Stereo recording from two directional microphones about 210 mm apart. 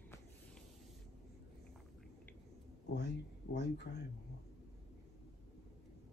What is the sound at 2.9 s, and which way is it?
Speech, 55° left (ahead or behind).